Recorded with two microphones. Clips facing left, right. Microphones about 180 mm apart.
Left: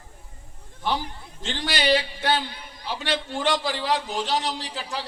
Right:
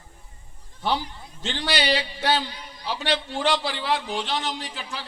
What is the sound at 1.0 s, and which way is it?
A man's voice, 50° left (ahead or behind).